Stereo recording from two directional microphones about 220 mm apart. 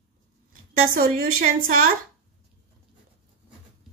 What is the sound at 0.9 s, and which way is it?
Speech, 40° right (ahead or behind).